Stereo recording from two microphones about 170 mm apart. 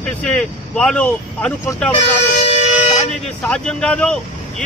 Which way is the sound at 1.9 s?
40° left (ahead or behind).